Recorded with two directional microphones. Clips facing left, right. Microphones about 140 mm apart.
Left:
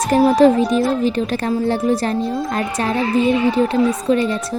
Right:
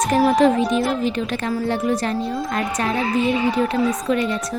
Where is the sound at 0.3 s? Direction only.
35° left (ahead or behind).